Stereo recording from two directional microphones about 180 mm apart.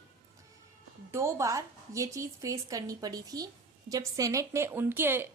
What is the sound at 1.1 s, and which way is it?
A woman's voice, 15° right (ahead or behind).